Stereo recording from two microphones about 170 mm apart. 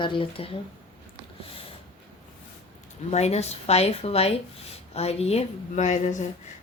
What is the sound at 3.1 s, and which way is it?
A woman's voice, 40° left (ahead or behind).